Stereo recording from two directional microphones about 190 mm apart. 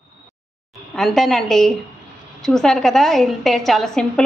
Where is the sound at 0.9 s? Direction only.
Centre (ahead or behind).